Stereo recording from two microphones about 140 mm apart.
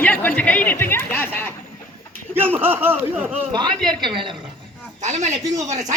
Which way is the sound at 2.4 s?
15° right (ahead or behind).